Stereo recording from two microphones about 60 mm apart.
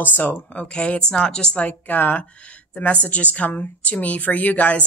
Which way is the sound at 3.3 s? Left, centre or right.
Left.